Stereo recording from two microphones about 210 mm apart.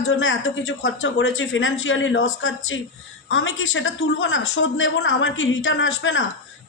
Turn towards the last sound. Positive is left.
turn(degrees=65)  # may be behind; listen again after turning